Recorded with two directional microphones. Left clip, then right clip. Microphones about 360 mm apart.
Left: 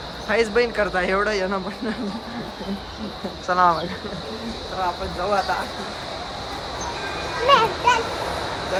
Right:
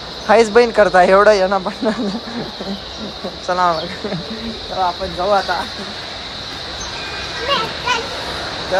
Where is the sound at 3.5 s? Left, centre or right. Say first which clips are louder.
Right 2 dB; centre.